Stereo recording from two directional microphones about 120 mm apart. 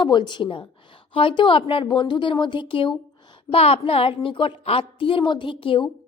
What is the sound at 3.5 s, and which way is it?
A woman's voice, 55° left (ahead or behind).